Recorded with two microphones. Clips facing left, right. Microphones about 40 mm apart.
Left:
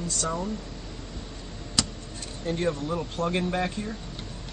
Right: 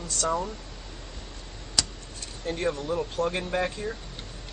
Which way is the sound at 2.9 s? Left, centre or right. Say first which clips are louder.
Right 1 dB; centre.